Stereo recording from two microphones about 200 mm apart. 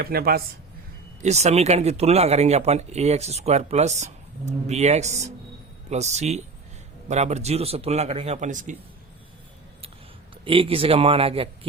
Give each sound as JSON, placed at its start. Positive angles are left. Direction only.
{"t": 0.0, "sound": "speech", "side_deg": -50}
{"t": 1.2, "sound": "speech", "side_deg": -35}
{"t": 10.4, "sound": "speech", "side_deg": -25}